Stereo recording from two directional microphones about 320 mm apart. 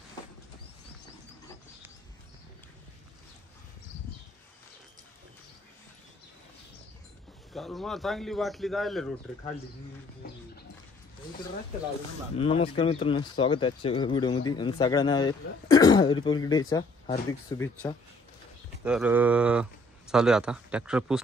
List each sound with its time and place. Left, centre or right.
7.5 s speech: centre
12.4 s speech: centre
18.9 s speech: centre